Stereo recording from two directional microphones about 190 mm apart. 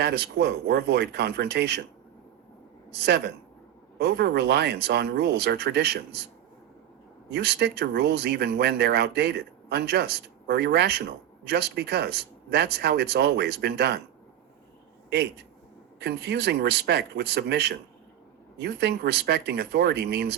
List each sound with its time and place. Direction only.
0.0 s speech: 60° right (ahead or behind)
2.9 s speech: 60° right (ahead or behind)
7.3 s speech: 60° right (ahead or behind)
16.0 s speech: 60° right (ahead or behind)